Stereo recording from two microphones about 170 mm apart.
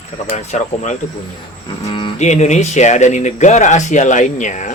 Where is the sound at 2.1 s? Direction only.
45° left (ahead or behind).